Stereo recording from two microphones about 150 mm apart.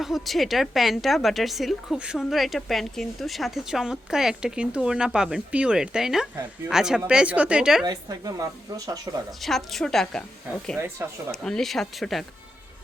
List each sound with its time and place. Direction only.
0.0 s a woman's voice: centre (ahead or behind)
7.9 s speech: 25° right (ahead or behind)
9.4 s a woman's voice: centre (ahead or behind)
10.8 s speech: 15° right (ahead or behind)
11.3 s a woman's voice: 5° left (ahead or behind)